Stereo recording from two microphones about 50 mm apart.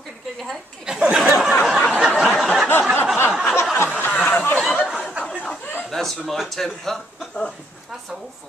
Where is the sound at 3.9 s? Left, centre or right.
Left.